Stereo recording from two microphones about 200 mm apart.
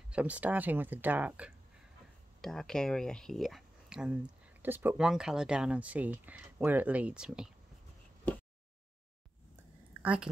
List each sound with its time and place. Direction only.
0.1 s speech: 5° right (ahead or behind)
10.0 s speech: 5° right (ahead or behind)